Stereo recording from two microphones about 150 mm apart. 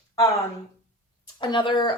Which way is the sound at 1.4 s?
30° left (ahead or behind).